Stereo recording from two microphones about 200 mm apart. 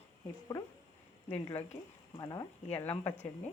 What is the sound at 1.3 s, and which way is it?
Speech, 10° left (ahead or behind).